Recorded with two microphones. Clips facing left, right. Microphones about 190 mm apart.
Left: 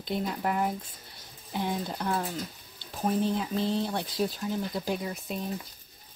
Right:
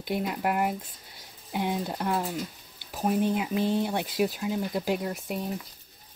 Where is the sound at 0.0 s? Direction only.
10° right (ahead or behind).